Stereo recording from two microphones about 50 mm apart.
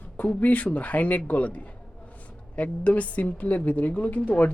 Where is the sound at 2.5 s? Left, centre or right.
Left.